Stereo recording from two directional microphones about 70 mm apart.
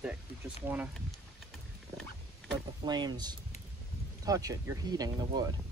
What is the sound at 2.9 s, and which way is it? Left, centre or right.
Speech, right.